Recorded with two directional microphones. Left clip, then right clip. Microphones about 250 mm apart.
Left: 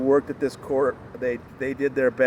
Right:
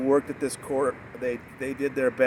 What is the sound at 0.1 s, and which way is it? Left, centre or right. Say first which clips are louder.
Speech: left 3 dB; centre.